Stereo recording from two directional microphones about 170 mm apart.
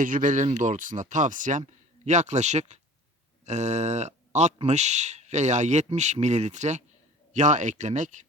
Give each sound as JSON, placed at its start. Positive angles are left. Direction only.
{"t": 0.0, "sound": "speech", "side_deg": -50}